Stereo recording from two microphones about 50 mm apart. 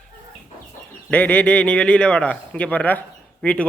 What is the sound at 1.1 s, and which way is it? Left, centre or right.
A man's voice, left.